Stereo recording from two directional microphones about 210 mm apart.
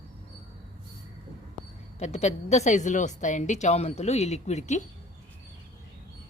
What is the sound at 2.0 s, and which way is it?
A woman's voice, 30° left (ahead or behind).